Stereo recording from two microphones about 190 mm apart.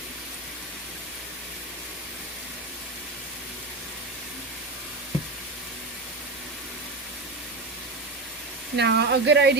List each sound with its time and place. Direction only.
8.7 s speech: 65° right (ahead or behind)